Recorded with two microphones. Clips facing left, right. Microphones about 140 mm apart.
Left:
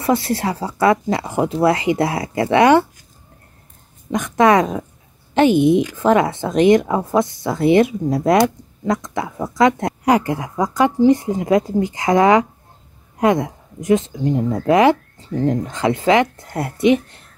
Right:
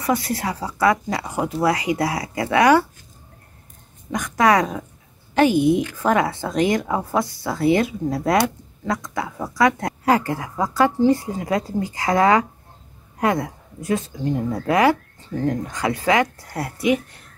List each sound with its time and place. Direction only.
0.0 s speech: 25° left (ahead or behind)
4.1 s speech: 25° left (ahead or behind)